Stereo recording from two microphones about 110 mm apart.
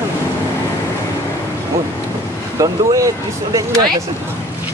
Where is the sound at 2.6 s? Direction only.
30° right (ahead or behind).